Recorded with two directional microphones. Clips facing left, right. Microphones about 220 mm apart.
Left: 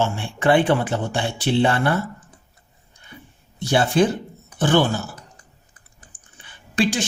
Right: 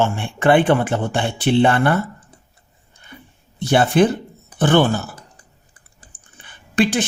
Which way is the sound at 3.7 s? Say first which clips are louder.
Right 3 dB; 60° right (ahead or behind).